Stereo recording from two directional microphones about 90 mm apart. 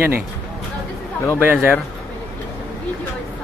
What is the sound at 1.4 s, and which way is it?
Speech, 20° right (ahead or behind).